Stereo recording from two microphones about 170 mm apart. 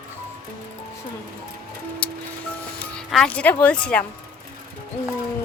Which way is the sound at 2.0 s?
10° left (ahead or behind).